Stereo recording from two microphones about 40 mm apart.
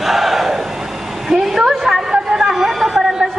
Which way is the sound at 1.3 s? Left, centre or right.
Centre.